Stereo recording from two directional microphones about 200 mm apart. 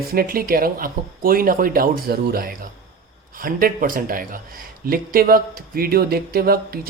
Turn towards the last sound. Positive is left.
turn(degrees=-50)  # may be behind; listen again after turning